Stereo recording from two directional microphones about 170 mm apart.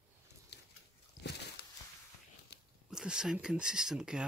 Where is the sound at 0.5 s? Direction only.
85° left.